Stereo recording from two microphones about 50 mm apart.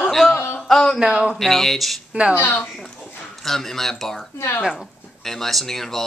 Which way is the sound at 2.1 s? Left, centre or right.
Right.